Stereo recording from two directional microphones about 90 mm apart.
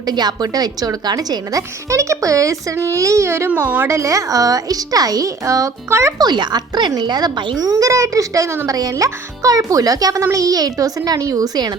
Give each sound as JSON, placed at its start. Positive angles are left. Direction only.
{"t": 0.0, "sound": "speech", "side_deg": -50}
{"t": 3.8, "sound": "speech", "side_deg": -35}
{"t": 6.1, "sound": "speech", "side_deg": -55}
{"t": 7.6, "sound": "a child's voice", "side_deg": -40}